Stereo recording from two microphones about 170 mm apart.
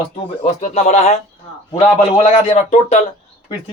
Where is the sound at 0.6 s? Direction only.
45° left (ahead or behind).